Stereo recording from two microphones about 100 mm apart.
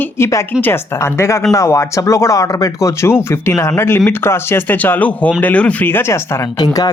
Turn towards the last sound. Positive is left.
turn(degrees=45)  # may be behind; listen again after turning